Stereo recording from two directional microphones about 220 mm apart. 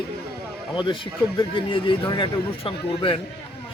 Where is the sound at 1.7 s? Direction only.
20° left (ahead or behind).